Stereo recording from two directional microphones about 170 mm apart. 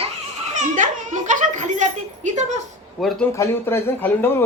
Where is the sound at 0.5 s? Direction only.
50° right (ahead or behind).